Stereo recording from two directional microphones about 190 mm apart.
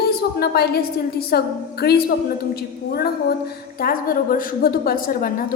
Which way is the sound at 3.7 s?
50° left (ahead or behind).